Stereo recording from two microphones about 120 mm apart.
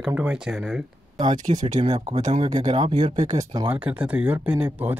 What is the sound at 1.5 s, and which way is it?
Speech, 55° right (ahead or behind).